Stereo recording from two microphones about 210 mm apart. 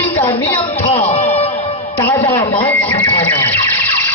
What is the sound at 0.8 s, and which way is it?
Music, 30° left (ahead or behind).